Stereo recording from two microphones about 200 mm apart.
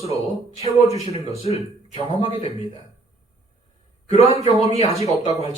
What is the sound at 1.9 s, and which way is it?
Speech, 25° left (ahead or behind).